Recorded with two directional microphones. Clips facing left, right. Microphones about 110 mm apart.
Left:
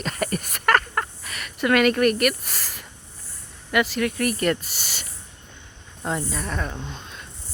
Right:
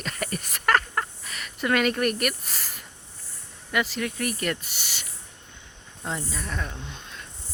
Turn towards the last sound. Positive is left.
turn(degrees=50)  # may be behind; listen again after turning